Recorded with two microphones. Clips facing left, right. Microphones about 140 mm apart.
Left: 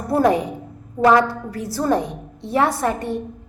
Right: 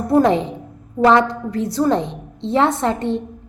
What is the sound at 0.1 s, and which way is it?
A woman's voice, 20° right (ahead or behind).